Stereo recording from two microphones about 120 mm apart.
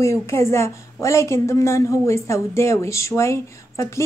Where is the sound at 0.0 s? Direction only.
25° left (ahead or behind).